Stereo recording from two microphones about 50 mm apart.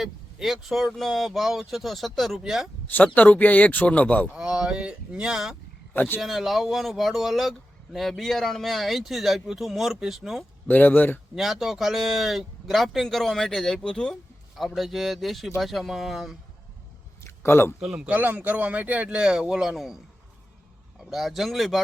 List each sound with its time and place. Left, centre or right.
0.0 s speech: centre
2.8 s speech: left
4.4 s speech: centre
10.7 s speech: left
11.3 s speech: centre
14.8 s speech: centre
17.2 s a sound: left
17.9 s speech: right; by 20.0 s centre
21.0 s speech: centre